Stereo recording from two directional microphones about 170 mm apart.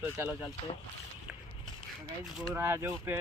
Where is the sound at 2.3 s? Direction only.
15° right (ahead or behind).